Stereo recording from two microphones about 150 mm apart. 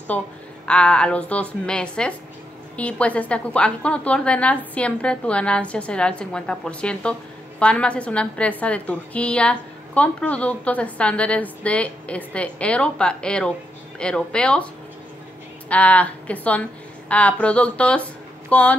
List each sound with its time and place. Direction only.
0.7 s a woman's voice: 5° left (ahead or behind)
15.7 s a woman's voice: 10° left (ahead or behind)